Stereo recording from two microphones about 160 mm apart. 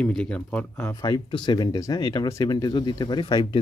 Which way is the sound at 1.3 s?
30° left (ahead or behind).